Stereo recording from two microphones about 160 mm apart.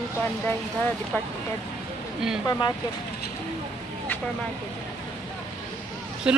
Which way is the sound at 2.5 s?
25° left (ahead or behind).